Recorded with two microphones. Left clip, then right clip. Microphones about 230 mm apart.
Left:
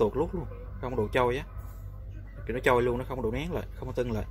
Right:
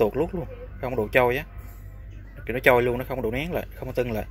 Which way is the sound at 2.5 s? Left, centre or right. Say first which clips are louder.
Right 6 dB; centre.